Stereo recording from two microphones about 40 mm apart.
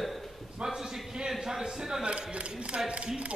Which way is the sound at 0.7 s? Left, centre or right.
Centre.